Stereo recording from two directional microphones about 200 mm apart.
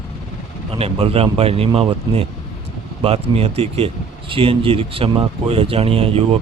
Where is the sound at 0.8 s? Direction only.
30° right (ahead or behind).